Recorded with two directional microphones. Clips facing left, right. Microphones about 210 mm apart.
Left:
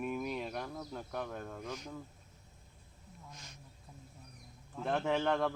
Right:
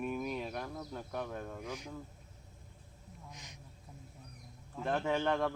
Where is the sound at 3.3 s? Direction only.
15° right (ahead or behind).